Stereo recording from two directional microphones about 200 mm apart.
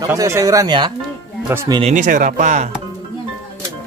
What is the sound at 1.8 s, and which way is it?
Speech, 40° right (ahead or behind).